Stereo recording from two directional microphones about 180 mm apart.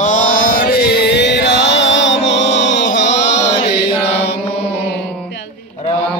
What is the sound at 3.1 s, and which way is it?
Chant, 40° left (ahead or behind).